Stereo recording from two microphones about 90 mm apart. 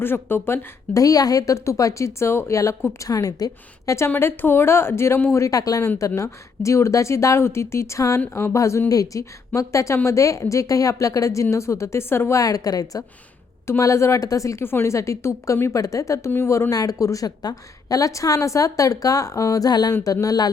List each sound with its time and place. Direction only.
0.0 s speech: 25° left (ahead or behind)
1.0 s a woman's voice: 40° left (ahead or behind)
3.9 s a woman's voice: 30° left (ahead or behind)
12.4 s a woman's voice: 40° left (ahead or behind)